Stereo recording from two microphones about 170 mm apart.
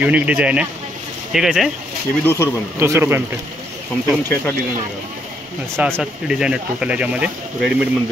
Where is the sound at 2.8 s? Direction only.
15° right (ahead or behind).